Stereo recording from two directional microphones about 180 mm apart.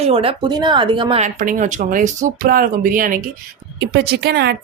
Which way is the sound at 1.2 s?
45° right (ahead or behind).